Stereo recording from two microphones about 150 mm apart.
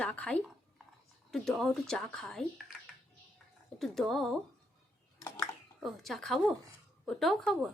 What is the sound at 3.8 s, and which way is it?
Speech, centre (ahead or behind).